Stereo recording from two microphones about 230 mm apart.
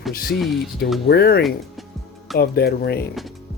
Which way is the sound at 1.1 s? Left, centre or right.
Left.